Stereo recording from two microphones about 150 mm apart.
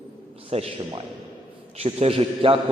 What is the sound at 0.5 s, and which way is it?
A man's voice, 40° right (ahead or behind).